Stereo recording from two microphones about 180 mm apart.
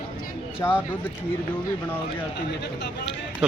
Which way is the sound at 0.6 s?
15° left (ahead or behind).